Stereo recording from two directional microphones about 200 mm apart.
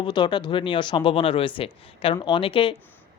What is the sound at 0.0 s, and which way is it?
Speech, 20° left (ahead or behind).